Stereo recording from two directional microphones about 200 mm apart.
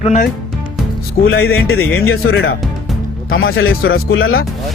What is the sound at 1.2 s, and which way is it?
Speech, 90° left.